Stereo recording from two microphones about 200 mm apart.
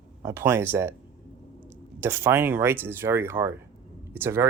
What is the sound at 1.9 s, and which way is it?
Speech, 10° right (ahead or behind).